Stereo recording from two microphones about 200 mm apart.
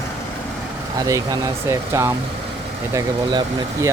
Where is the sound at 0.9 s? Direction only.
15° right (ahead or behind).